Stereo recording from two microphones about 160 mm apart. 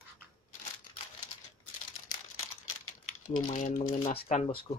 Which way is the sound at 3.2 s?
50° left (ahead or behind).